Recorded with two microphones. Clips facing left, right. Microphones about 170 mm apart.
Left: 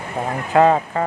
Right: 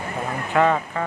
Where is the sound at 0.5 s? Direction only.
35° left (ahead or behind).